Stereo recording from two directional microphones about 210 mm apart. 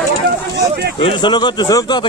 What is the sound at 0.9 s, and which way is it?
Speech, 25° left (ahead or behind).